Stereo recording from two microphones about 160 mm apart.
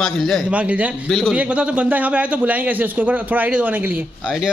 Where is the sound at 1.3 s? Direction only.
10° right (ahead or behind).